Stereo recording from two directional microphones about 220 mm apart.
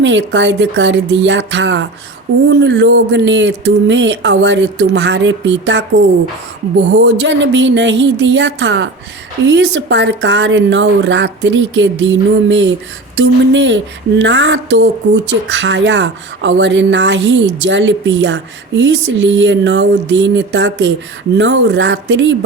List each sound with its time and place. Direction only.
0.0 s speech: 55° right (ahead or behind)
6.9 s speech: 55° right (ahead or behind)